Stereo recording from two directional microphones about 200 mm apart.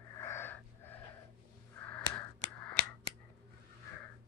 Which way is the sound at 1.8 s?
5° left (ahead or behind).